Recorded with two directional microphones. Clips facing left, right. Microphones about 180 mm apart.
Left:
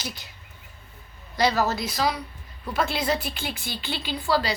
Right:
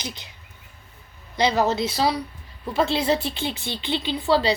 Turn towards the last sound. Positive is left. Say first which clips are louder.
# right 4 dB
turn(degrees=-25)  # may be behind; listen again after turning